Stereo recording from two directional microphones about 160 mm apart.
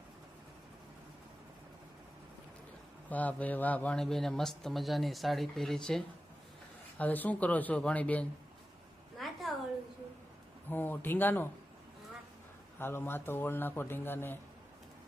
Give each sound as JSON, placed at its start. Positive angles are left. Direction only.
{"t": 3.1, "sound": "speech", "side_deg": 10}
{"t": 7.0, "sound": "a man's voice", "side_deg": 10}
{"t": 9.1, "sound": "a sound", "side_deg": 0}
{"t": 10.7, "sound": "a man's voice", "side_deg": 10}
{"t": 12.8, "sound": "a man's voice", "side_deg": 15}